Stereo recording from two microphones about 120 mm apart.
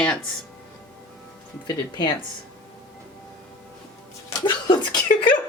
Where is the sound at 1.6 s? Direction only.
35° left (ahead or behind).